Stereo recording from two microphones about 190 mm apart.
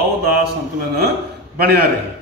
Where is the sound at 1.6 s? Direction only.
55° right (ahead or behind).